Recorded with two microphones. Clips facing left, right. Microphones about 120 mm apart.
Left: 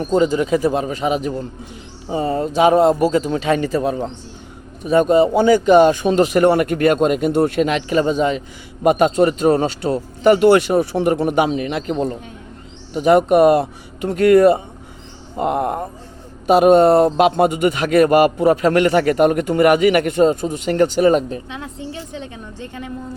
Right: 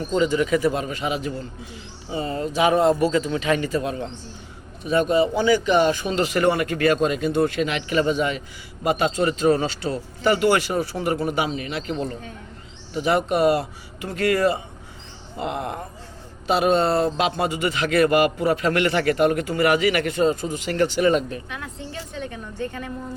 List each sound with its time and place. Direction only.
0.0 s a man's voice: 40° left (ahead or behind)
8.8 s a man's voice: 50° left (ahead or behind)
21.2 s a woman's voice: 25° left (ahead or behind)